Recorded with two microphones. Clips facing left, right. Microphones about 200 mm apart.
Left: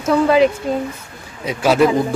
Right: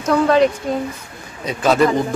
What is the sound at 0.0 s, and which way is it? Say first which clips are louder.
Speech: left 1 dB; 5° left (ahead or behind).